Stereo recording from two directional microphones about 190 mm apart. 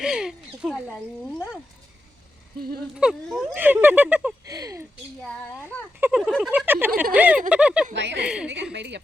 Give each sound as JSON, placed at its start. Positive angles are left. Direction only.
{"t": 0.0, "sound": "speech", "side_deg": -5}
{"t": 2.6, "sound": "speech", "side_deg": -50}
{"t": 2.9, "sound": "speech", "side_deg": -5}
{"t": 4.4, "sound": "speech", "side_deg": -20}
{"t": 5.2, "sound": "a child's voice", "side_deg": 5}
{"t": 6.0, "sound": "speech", "side_deg": -5}
{"t": 7.9, "sound": "speech", "side_deg": -65}